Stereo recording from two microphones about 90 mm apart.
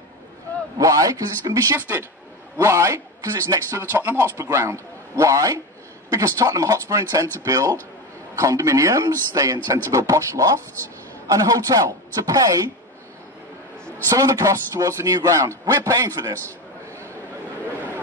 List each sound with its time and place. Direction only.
0.7 s a man's voice: 40° right (ahead or behind)
1.8 s a man's voice: 25° right (ahead or behind)
3.9 s a man's voice: 25° right (ahead or behind); by 12.6 s 40° right (ahead or behind)
14.0 s a man's voice: 40° right (ahead or behind)